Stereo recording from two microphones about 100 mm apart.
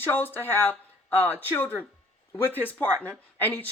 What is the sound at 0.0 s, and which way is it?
Speech, 20° left (ahead or behind).